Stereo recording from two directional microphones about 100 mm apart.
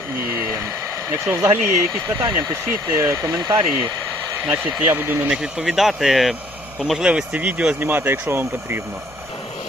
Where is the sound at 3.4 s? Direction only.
50° right (ahead or behind).